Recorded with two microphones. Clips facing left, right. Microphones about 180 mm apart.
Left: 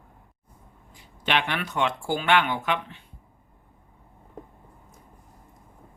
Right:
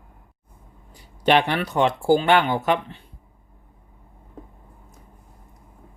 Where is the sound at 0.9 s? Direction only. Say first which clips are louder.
Right 8 dB; 40° right (ahead or behind).